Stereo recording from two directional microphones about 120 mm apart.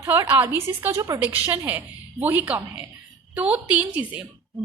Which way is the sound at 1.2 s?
15° right (ahead or behind).